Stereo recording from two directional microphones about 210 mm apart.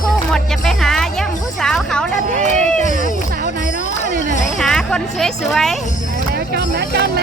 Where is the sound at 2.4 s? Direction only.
35° right (ahead or behind).